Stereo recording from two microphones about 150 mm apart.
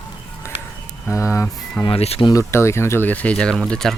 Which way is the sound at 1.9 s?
40° left (ahead or behind).